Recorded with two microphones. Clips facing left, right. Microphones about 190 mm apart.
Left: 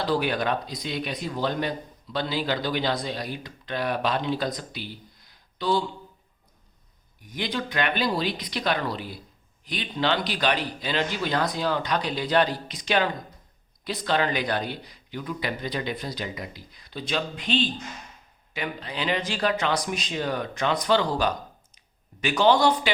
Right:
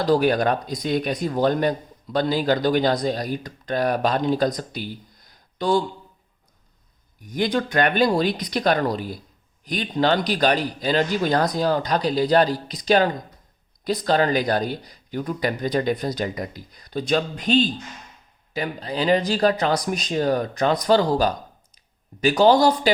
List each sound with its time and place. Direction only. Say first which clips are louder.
0.0 s speech: right 6 dB; 45° right (ahead or behind)
7.2 s speech: right 7 dB; 45° right (ahead or behind)